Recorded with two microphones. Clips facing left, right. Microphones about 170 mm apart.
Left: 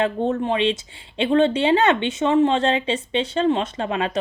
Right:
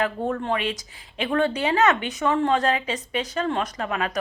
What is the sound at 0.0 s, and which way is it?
Speech, 25° left (ahead or behind).